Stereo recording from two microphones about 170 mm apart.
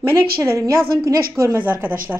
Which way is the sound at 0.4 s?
15° right (ahead or behind).